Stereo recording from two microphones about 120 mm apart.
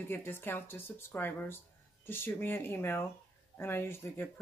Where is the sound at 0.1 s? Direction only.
20° left (ahead or behind).